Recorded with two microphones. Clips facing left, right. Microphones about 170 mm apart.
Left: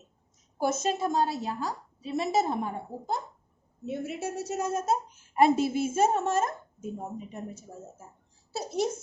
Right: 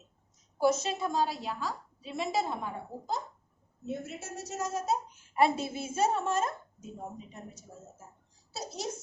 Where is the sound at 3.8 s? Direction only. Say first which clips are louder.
Left 5 dB; 60° left (ahead or behind); by 6.5 s 45° left (ahead or behind).